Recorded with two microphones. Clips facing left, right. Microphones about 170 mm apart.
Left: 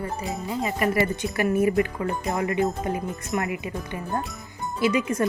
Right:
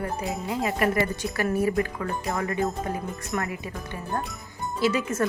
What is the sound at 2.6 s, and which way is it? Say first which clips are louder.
Speech: left 3 dB; centre (ahead or behind).